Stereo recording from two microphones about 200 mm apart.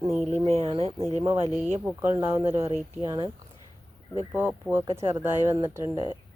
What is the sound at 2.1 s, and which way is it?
Speech, 15° right (ahead or behind).